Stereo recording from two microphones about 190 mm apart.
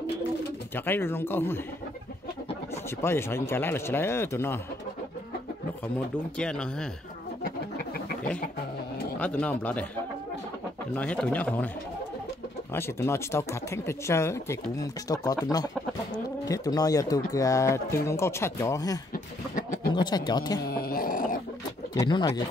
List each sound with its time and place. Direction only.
0.7 s speech: 10° left (ahead or behind)
3.0 s speech: 15° left (ahead or behind)
6.3 s speech: 5° left (ahead or behind)
9.2 s speech: 5° left (ahead or behind)
11.0 s speech: 5° left (ahead or behind)
12.7 s speech: 15° left (ahead or behind)
19.1 s a sound: 45° left (ahead or behind)
19.9 s speech: 25° left (ahead or behind)
20.7 s a sound: 50° left (ahead or behind)
21.9 s speech: 20° left (ahead or behind)